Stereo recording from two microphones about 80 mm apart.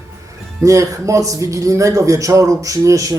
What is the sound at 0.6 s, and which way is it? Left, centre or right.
A man's voice, right.